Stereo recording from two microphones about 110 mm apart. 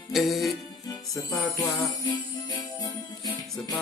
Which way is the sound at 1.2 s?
35° left (ahead or behind).